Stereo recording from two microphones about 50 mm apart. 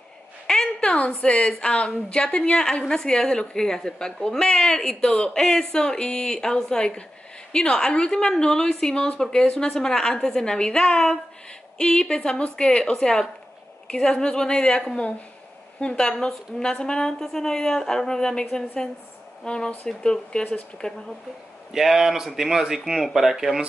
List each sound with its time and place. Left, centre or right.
0.5 s a sound: centre
0.8 s a woman's voice: left
21.7 s speech: centre